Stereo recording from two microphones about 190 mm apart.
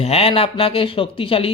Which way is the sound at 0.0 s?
30° left (ahead or behind).